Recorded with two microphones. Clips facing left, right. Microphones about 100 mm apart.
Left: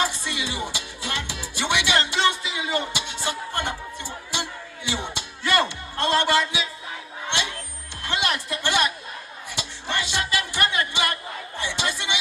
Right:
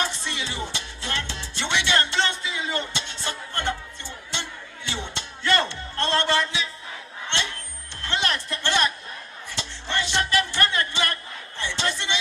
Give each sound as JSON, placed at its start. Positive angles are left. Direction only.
{"t": 0.0, "sound": "music", "side_deg": 15}
{"t": 8.0, "sound": "a sound", "side_deg": 15}
{"t": 9.6, "sound": "music", "side_deg": 15}